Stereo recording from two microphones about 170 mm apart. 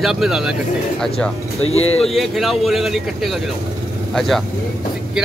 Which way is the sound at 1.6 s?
35° left (ahead or behind).